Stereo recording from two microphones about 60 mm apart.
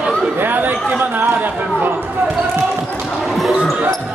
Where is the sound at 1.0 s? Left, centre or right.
Right.